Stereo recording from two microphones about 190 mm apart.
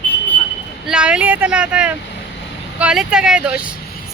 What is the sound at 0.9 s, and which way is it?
A woman's voice, 5° right (ahead or behind).